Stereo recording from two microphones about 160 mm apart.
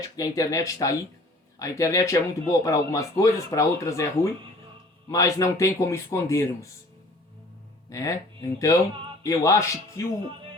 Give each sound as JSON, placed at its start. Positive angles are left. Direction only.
{"t": 0.2, "sound": "speech", "side_deg": 20}
{"t": 7.9, "sound": "speech", "side_deg": 20}